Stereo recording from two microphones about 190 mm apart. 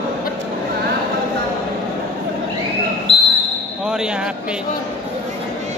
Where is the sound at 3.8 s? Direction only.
5° right (ahead or behind).